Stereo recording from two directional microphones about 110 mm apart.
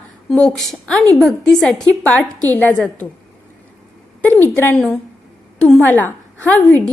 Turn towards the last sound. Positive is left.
turn(degrees=15)  # may be behind; listen again after turning